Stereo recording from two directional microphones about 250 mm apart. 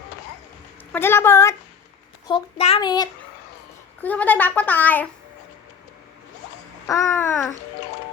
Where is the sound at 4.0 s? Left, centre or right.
Centre.